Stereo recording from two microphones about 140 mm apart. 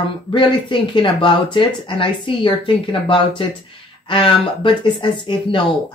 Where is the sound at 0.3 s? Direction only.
35° left (ahead or behind).